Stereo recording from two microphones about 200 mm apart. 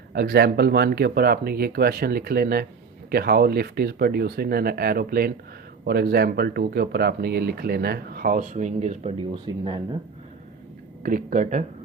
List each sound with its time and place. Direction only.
0.1 s speech: 55° right (ahead or behind); by 9.8 s 25° right (ahead or behind)
11.0 s speech: 45° right (ahead or behind)